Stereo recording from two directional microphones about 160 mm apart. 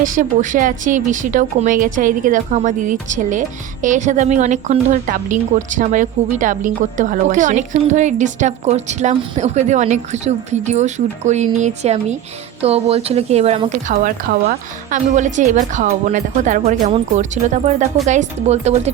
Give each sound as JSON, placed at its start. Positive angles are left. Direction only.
{"t": 0.0, "sound": "a woman's voice", "side_deg": -55}